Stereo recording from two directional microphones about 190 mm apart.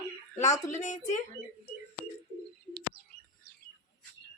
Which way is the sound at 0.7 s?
40° left (ahead or behind).